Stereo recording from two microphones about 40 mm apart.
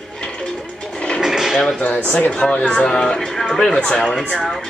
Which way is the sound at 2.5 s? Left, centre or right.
Left.